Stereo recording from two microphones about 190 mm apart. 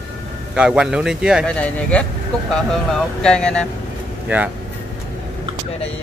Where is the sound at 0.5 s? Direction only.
5° right (ahead or behind).